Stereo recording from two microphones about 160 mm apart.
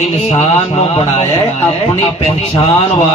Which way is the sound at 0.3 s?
40° left (ahead or behind).